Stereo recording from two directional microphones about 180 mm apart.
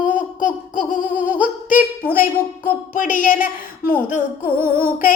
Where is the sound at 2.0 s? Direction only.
10° right (ahead or behind).